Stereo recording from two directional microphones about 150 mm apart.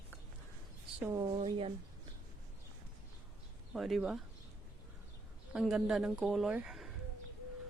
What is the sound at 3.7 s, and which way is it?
Speech, centre (ahead or behind).